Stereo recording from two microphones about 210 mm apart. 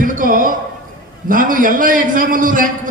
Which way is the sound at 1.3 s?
40° right (ahead or behind).